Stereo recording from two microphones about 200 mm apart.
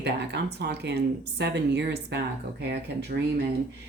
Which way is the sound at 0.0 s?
55° right (ahead or behind).